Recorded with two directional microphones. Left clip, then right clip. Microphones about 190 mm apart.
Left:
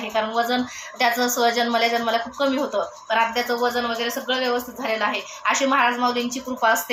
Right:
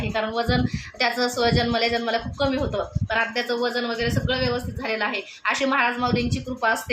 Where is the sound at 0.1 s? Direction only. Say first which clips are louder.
Left 3 dB; 45° right (ahead or behind).